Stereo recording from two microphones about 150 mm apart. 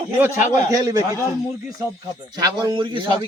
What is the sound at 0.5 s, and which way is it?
Speech, 25° right (ahead or behind).